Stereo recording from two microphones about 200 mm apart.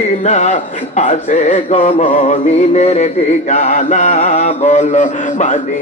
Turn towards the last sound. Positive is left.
turn(degrees=40)  # may be behind; listen again after turning